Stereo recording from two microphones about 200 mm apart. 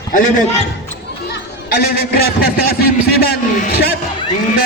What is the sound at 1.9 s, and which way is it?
A man's voice, 50° left (ahead or behind).